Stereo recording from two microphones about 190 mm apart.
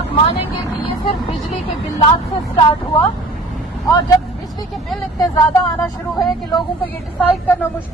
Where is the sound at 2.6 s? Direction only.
25° left (ahead or behind).